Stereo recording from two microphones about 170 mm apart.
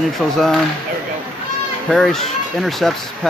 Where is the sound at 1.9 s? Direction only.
Centre (ahead or behind).